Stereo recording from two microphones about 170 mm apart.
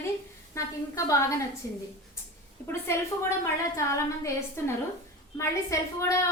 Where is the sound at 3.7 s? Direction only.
15° left (ahead or behind).